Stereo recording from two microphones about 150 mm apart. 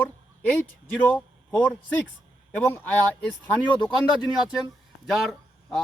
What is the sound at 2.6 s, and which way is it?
A man's voice, 10° left (ahead or behind).